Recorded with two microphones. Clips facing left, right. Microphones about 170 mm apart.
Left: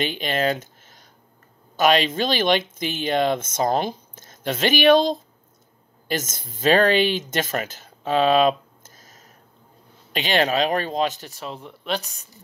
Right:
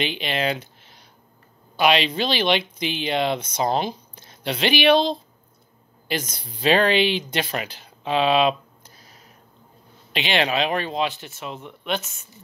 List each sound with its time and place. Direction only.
0.0 s speech: 45° left (ahead or behind)